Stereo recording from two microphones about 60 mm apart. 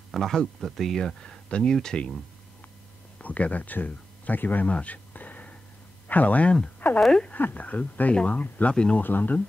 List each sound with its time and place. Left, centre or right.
0.1 s speech: centre
3.2 s speech: left
4.6 s a sound: left
6.0 s speech: left
7.0 s speech: centre
7.3 s speech: left
9.0 s speech: left